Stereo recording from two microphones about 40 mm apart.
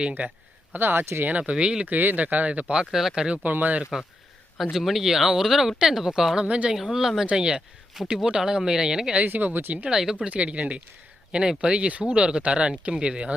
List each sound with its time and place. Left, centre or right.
0.2 s speech: right
1.3 s speech: right
1.9 s speech: right
2.7 s speech: centre
3.4 s speech: right
4.7 s speech: centre
6.4 s speech: right
6.8 s speech: centre
9.2 s speech: right
9.9 s speech: centre
10.2 s speech: right
11.3 s speech: right